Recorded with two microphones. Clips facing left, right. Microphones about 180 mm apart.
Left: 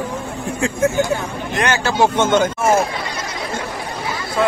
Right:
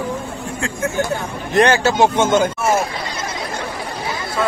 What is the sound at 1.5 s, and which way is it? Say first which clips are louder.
Speech: right 6 dB; 35° right (ahead or behind).